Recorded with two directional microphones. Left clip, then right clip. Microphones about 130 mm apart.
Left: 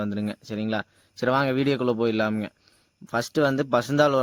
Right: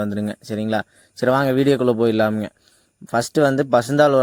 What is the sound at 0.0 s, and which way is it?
Speech, 40° right (ahead or behind).